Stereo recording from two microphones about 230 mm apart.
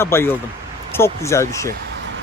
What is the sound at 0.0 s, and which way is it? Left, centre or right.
Speech, centre.